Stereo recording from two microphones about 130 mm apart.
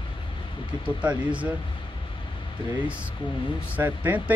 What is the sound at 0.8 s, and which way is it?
Speech, 10° right (ahead or behind).